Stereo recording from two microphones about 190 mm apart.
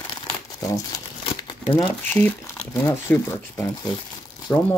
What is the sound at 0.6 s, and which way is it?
Speech, 20° left (ahead or behind).